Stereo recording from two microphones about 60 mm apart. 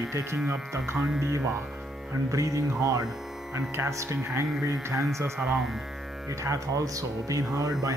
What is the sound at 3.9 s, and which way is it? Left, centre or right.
Speech, right.